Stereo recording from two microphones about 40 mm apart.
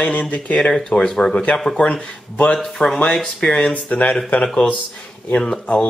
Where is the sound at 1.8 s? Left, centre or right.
Left.